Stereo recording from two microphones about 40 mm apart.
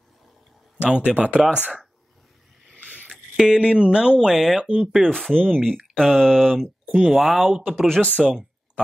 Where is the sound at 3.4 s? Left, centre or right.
Centre.